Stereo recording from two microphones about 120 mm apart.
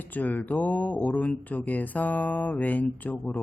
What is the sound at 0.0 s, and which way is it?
Speech, 15° left (ahead or behind).